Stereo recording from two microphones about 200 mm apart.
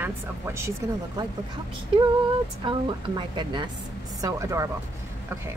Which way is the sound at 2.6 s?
25° right (ahead or behind).